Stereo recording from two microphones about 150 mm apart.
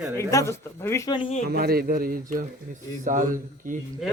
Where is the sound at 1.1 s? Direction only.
35° left (ahead or behind).